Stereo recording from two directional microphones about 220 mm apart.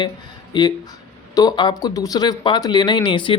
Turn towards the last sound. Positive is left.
turn(degrees=20)  # may be behind; listen again after turning